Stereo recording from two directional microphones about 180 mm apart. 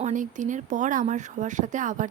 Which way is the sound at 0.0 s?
45° right (ahead or behind).